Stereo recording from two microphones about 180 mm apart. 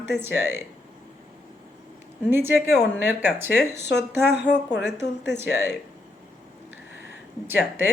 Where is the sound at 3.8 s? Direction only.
70° left (ahead or behind).